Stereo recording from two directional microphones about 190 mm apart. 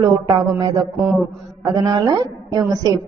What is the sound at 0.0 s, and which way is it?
Speech, 25° right (ahead or behind).